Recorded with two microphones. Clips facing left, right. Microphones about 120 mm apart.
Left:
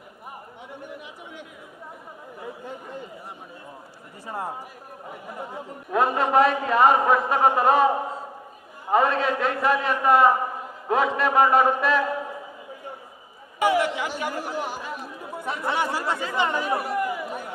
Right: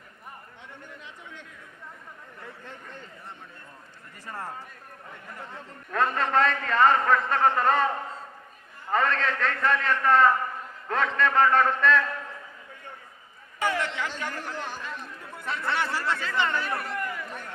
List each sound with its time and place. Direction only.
0.7 s chatter: 10° left (ahead or behind)
4.3 s a man's voice: 15° left (ahead or behind)